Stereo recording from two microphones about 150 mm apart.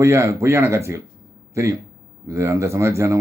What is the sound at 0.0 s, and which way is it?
Speech, 20° right (ahead or behind).